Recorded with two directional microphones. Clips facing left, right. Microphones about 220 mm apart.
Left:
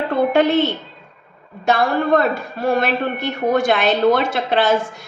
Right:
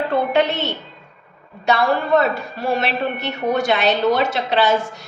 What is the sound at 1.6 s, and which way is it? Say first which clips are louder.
A woman's voice: left 1 dB; 50° left (ahead or behind).